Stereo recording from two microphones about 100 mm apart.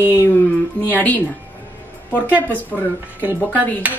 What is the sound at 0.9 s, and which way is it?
Speech, 15° left (ahead or behind).